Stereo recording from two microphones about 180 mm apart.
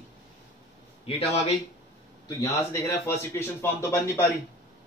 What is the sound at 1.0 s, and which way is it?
Speech, 35° left (ahead or behind).